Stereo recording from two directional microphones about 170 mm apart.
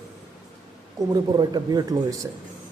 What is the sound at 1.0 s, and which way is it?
Speech, 20° right (ahead or behind).